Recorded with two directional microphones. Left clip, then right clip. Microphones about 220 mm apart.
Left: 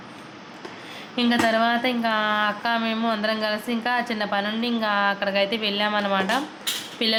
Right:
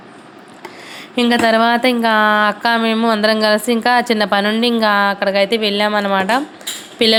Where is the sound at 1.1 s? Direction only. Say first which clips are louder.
Right 8 dB; 35° right (ahead or behind).